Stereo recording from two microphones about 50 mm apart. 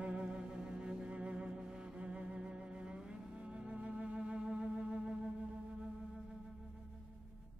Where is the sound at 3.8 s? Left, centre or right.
Right.